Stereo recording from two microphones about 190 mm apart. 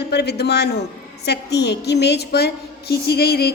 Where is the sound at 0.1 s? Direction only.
60° left (ahead or behind).